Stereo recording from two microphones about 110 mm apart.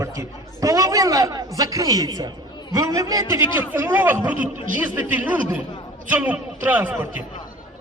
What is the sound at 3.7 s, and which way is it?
Speech, 15° right (ahead or behind).